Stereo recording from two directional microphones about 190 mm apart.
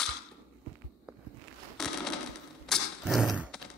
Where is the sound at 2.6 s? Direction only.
Centre (ahead or behind).